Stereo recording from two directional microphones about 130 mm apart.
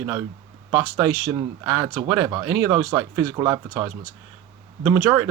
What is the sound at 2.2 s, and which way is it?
Speech, 30° right (ahead or behind).